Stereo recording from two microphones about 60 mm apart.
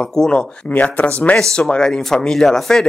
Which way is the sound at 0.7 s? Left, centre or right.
Left.